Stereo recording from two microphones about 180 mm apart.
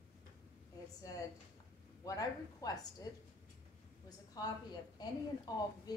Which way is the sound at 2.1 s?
20° left (ahead or behind).